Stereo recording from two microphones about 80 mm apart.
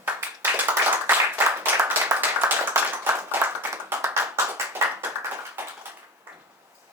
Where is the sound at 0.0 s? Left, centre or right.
Right.